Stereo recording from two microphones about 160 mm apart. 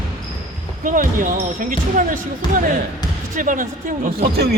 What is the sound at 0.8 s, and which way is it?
Speech, 55° right (ahead or behind).